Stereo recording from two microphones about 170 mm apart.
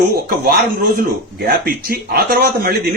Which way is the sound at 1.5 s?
65° right (ahead or behind).